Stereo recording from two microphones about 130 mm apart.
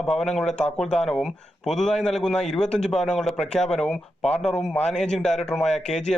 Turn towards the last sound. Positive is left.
turn(degrees=0)  # may be behind; listen again after turning